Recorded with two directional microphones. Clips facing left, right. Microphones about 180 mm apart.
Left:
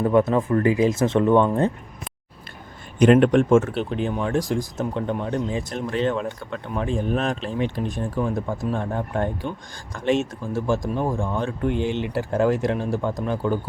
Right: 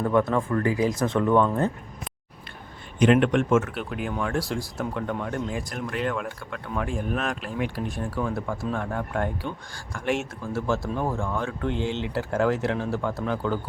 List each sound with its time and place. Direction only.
0.0 s speech: 20° left (ahead or behind)
3.0 s speech: 40° left (ahead or behind); by 13.6 s 15° left (ahead or behind)